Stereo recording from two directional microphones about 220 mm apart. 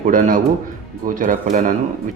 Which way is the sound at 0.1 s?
40° right (ahead or behind).